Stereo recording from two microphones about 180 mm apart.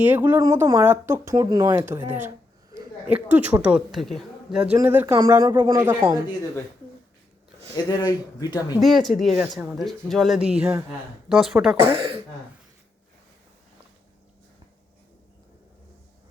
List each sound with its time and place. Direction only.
0.0 s a woman's voice: 10° right (ahead or behind)
7.9 s speech: 20° left (ahead or behind)
8.8 s a woman's voice: centre (ahead or behind)